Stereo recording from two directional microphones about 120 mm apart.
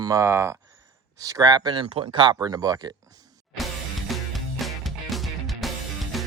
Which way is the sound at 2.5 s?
30° right (ahead or behind).